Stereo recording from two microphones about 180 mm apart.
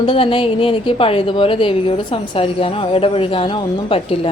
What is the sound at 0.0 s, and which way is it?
A woman's voice, 30° left (ahead or behind).